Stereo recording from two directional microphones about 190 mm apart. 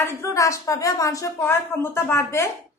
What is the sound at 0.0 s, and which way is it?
A woman's voice, 15° left (ahead or behind).